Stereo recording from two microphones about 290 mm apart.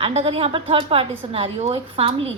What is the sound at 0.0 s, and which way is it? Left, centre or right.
A woman's voice, right.